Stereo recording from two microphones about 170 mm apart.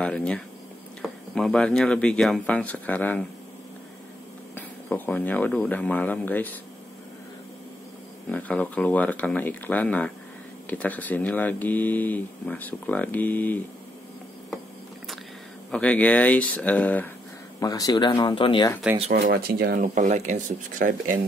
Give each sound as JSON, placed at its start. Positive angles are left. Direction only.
{"t": 0.0, "sound": "speech", "side_deg": 5}
{"t": 4.6, "sound": "speech", "side_deg": 10}
{"t": 8.3, "sound": "speech", "side_deg": 10}
{"t": 15.7, "sound": "speech", "side_deg": 10}
{"t": 17.6, "sound": "speech", "side_deg": 20}
{"t": 19.1, "sound": "speech", "side_deg": -60}